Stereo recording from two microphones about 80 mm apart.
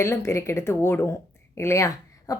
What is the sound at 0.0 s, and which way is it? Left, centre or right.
A woman's voice, left.